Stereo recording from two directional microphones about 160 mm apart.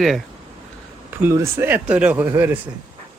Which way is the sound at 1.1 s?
15° right (ahead or behind).